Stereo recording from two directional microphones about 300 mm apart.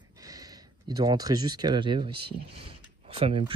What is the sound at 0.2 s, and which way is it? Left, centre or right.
Speech, centre.